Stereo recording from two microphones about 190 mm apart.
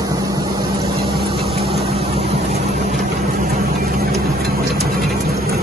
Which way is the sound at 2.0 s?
30° right (ahead or behind).